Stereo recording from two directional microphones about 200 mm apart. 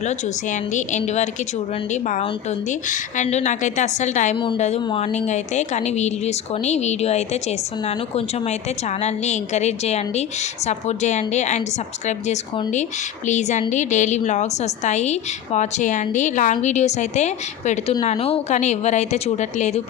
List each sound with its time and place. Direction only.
0.0 s a woman's voice: 35° left (ahead or behind)